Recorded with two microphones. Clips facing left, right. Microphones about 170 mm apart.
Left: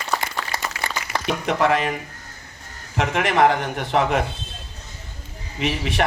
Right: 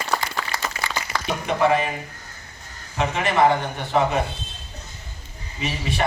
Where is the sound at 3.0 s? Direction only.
80° left.